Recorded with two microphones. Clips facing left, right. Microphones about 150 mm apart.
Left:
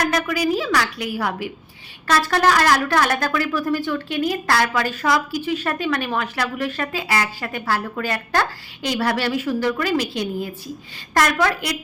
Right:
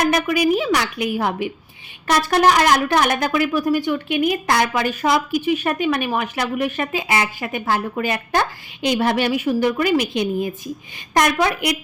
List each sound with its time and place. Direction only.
0.0 s a woman's voice: 20° right (ahead or behind)